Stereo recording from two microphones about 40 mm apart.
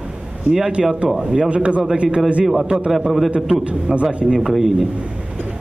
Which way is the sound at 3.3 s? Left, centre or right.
Right.